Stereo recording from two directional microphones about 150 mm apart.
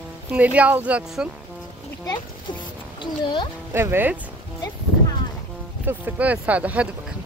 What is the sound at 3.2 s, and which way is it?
Speech, 30° left (ahead or behind).